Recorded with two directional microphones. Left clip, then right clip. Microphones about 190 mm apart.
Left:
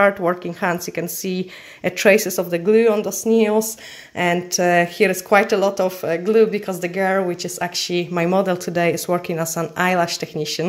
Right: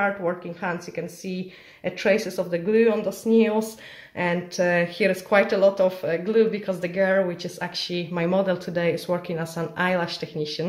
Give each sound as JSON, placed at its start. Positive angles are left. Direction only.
{"t": 0.0, "sound": "speech", "side_deg": 50}